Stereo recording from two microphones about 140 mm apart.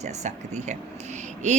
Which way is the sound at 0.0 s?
55° right (ahead or behind).